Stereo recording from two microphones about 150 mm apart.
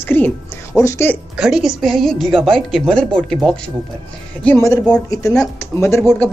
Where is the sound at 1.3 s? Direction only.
Centre (ahead or behind).